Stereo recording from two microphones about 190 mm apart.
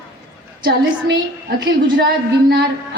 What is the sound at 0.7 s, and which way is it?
Speech, 60° right (ahead or behind).